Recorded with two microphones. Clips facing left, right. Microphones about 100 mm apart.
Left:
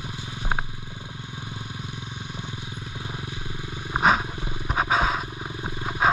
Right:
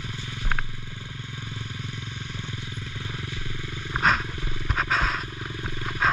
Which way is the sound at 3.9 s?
25° left (ahead or behind).